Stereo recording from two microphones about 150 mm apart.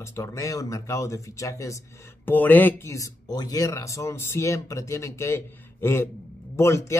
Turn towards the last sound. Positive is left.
turn(degrees=20)  # may be behind; listen again after turning